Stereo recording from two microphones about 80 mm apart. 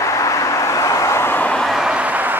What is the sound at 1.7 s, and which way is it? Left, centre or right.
Vehicle, centre.